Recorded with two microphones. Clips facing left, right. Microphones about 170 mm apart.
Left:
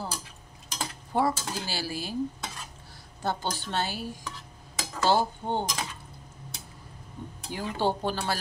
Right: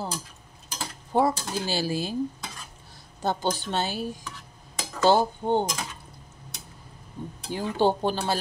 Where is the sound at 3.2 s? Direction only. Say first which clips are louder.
Right 4 dB; 20° right (ahead or behind).